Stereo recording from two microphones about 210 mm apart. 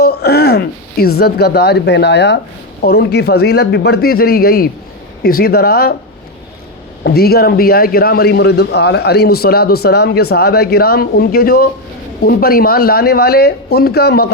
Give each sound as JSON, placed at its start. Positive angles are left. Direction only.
{"t": 0.0, "sound": "a man's voice", "side_deg": 50}
{"t": 7.0, "sound": "a man's voice", "side_deg": 50}